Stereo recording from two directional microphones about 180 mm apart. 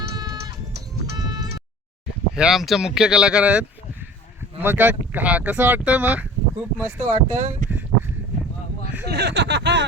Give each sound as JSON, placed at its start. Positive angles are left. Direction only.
{"t": 0.1, "sound": "a sound", "side_deg": -20}
{"t": 1.1, "sound": "music", "side_deg": -20}
{"t": 2.3, "sound": "speech", "side_deg": -5}
{"t": 7.1, "sound": "speech", "side_deg": -45}
{"t": 9.0, "sound": "speech", "side_deg": -65}